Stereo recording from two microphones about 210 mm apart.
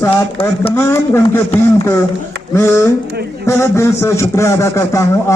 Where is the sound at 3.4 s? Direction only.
15° left (ahead or behind).